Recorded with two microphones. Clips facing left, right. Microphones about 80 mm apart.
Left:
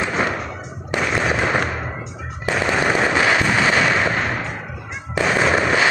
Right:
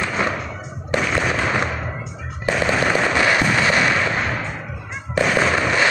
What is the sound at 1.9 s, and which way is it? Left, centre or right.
Music, centre.